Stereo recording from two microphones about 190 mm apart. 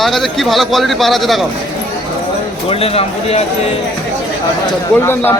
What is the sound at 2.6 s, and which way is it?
Speech, 30° left (ahead or behind).